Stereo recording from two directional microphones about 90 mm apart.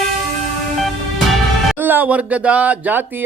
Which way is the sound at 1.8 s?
20° right (ahead or behind).